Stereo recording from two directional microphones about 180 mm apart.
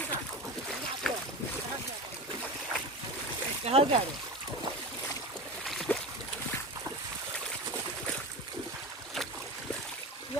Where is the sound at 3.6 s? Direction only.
35° right (ahead or behind).